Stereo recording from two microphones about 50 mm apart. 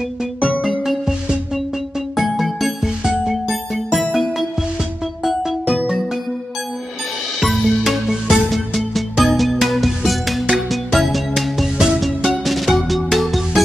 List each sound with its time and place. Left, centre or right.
0.6 s music: centre
2.1 s music: centre
7.3 s music: centre